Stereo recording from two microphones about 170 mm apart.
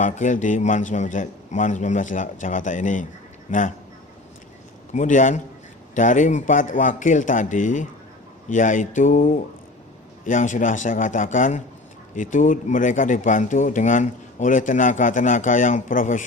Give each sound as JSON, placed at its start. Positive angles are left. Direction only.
{"t": 0.0, "sound": "speech", "side_deg": 45}
{"t": 4.9, "sound": "speech", "side_deg": 45}